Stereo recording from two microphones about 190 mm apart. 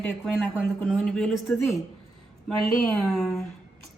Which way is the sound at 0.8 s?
5° left (ahead or behind).